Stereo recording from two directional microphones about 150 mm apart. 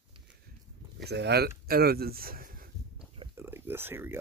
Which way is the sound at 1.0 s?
90° right.